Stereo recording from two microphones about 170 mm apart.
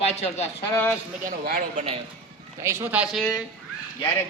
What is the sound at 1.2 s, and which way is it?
Speech, 60° right (ahead or behind).